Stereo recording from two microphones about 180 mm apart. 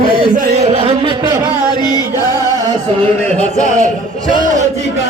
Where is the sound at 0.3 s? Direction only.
35° right (ahead or behind).